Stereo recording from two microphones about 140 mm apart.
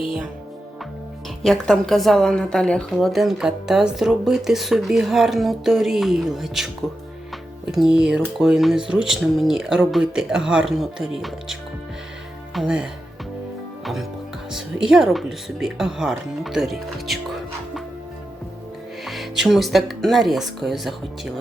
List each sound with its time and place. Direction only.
1.4 s a woman's voice: 5° left (ahead or behind)
12.5 s a woman's voice: 5° right (ahead or behind)
19.0 s a woman's voice: centre (ahead or behind)